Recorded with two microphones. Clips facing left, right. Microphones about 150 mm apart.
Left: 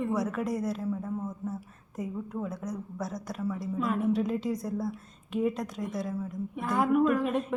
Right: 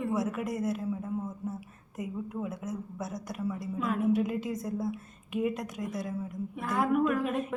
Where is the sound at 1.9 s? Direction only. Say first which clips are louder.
Left 1 dB; centre (ahead or behind).